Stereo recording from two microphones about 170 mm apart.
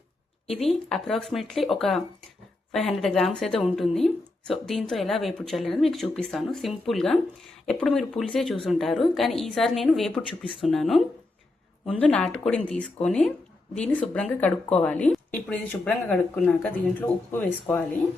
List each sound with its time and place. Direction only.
0.4 s a woman's voice: centre (ahead or behind)